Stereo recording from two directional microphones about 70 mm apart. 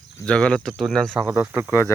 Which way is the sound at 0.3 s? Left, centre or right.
Centre.